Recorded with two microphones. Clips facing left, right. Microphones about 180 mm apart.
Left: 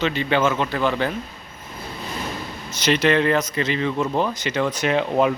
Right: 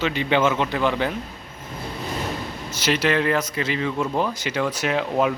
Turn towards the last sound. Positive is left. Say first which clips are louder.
# left 2 dB
turn(degrees=-5)  # may be behind; listen again after turning